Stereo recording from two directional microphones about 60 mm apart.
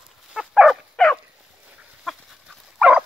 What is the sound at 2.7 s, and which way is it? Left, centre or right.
Dog, centre.